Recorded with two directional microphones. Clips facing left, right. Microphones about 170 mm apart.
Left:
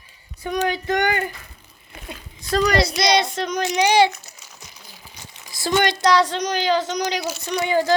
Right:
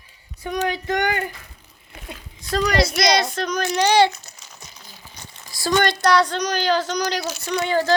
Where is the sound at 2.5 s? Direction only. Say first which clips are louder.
Left 1 dB; 35° left (ahead or behind); by 4.1 s 15° left (ahead or behind).